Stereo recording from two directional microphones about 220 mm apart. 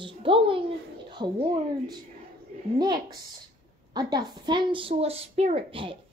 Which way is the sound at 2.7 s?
20° right (ahead or behind).